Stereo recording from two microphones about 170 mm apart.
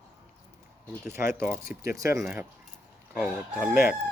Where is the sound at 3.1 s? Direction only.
5° right (ahead or behind).